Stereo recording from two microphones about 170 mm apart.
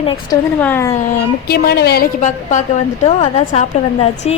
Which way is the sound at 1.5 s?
65° left (ahead or behind).